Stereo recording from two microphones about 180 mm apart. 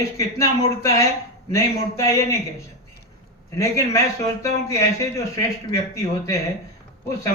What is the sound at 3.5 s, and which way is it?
Speech, 15° left (ahead or behind).